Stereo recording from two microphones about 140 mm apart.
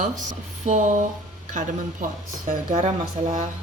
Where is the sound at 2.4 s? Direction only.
65° right (ahead or behind).